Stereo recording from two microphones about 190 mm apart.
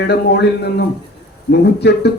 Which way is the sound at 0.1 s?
60° left (ahead or behind).